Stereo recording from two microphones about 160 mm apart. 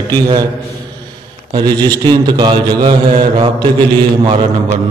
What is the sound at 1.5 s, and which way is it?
A man's voice, 25° right (ahead or behind).